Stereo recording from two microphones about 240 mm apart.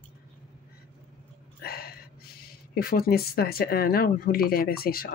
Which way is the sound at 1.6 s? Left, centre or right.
Left.